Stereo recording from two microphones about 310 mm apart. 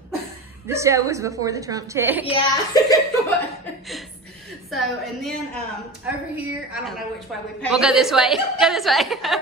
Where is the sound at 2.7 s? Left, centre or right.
Centre.